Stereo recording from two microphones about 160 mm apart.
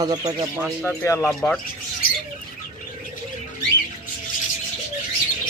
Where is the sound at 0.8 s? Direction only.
15° left (ahead or behind).